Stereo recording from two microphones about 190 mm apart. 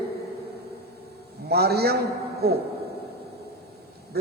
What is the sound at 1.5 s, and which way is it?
A man's voice, 55° right (ahead or behind).